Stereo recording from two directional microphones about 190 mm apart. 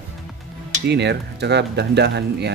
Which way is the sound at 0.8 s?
65° right (ahead or behind).